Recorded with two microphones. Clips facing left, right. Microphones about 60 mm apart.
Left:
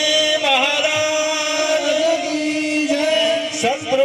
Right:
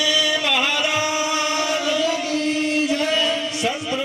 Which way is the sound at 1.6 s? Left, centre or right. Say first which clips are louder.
Left 4 dB; left.